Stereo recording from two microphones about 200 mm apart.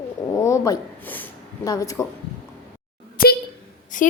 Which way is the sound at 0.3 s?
15° left (ahead or behind).